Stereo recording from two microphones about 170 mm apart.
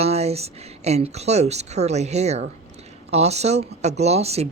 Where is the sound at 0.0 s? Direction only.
40° right (ahead or behind).